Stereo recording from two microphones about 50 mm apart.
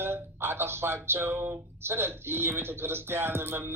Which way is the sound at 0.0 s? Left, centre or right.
Right.